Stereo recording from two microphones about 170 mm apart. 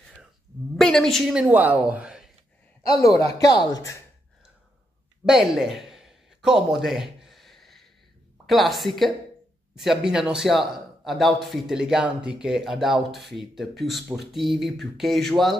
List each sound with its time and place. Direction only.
0.7 s a man's voice: 5° left (ahead or behind)
3.0 s a man's voice: 20° left (ahead or behind)
5.2 s a sound: centre (ahead or behind)
8.5 s a man's voice: centre (ahead or behind)